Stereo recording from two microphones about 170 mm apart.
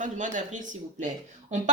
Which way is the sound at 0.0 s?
50° right (ahead or behind).